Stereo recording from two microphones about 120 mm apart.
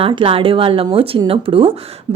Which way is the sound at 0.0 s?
45° right (ahead or behind).